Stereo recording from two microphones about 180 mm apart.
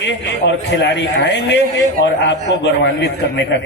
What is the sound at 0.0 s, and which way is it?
A man's voice, 85° left.